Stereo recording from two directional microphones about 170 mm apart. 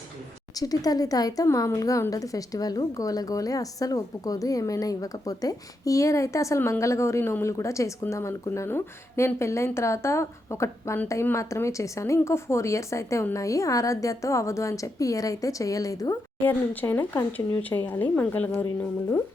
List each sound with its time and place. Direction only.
0.5 s speech: 20° left (ahead or behind)